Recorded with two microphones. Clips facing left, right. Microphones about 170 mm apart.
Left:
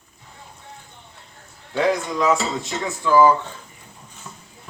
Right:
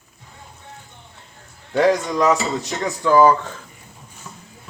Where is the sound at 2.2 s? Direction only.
Centre (ahead or behind).